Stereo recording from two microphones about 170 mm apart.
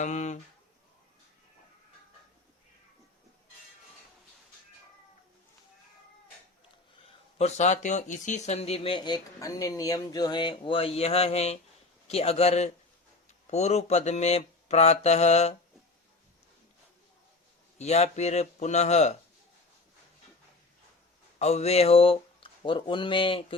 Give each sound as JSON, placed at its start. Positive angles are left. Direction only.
{"t": 0.0, "sound": "speech", "side_deg": 45}
{"t": 7.0, "sound": "speech", "side_deg": 40}
{"t": 17.7, "sound": "speech", "side_deg": 40}
{"t": 21.3, "sound": "speech", "side_deg": 40}